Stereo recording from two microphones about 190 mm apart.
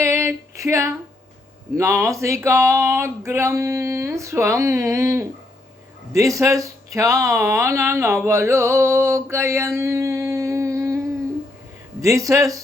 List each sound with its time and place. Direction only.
0.0 s female singing: 15° right (ahead or behind)
1.7 s speech: 15° right (ahead or behind)
12.0 s speech: 15° right (ahead or behind)